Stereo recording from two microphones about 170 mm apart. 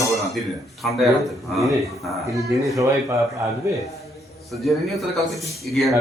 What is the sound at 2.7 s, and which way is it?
Speech, 20° right (ahead or behind).